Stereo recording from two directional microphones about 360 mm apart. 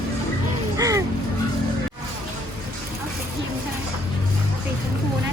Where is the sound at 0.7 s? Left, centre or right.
Centre.